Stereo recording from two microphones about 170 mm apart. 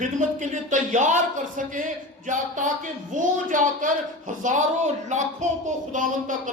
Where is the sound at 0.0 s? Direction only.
45° right (ahead or behind).